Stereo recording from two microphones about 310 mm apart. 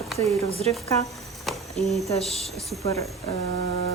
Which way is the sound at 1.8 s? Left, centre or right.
Centre.